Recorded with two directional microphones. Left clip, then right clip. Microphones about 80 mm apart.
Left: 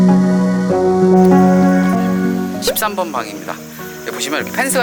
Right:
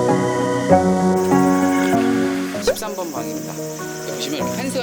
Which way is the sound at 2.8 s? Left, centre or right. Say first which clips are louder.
Left 8 dB; right.